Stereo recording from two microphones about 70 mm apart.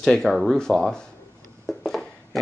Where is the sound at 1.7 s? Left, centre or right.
Centre.